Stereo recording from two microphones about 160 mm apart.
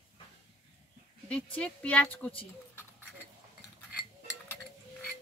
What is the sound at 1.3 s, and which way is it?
Speech, 10° left (ahead or behind).